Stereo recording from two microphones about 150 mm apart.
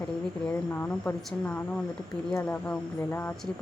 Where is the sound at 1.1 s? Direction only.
10° left (ahead or behind).